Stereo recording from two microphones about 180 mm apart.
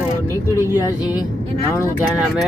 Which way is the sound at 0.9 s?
20° left (ahead or behind).